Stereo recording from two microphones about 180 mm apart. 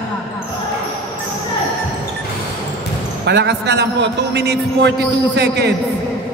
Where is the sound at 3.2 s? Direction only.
70° right (ahead or behind).